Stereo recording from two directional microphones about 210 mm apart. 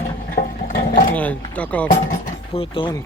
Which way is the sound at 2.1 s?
25° left (ahead or behind).